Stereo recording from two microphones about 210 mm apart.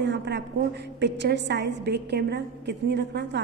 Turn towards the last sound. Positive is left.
turn(degrees=-55)  # may be behind; listen again after turning